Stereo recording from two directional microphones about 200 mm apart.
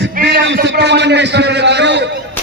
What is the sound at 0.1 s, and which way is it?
A man's voice, 50° right (ahead or behind).